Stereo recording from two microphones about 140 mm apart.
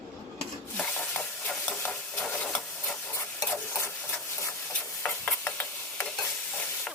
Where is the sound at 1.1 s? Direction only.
10° left (ahead or behind).